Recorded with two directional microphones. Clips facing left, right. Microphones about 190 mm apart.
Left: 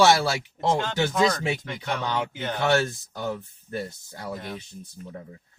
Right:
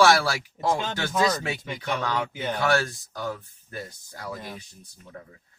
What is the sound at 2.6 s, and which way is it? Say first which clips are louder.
Speech: left 2 dB; 25° left (ahead or behind).